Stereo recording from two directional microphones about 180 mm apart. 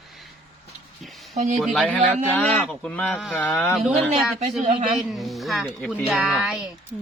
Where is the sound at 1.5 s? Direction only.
Centre (ahead or behind).